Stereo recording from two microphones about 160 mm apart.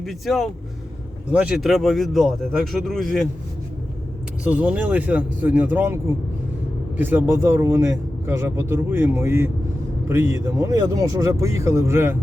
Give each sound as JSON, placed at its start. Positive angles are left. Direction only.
{"t": 0.0, "sound": "speech", "side_deg": 0}
{"t": 4.4, "sound": "speech", "side_deg": -10}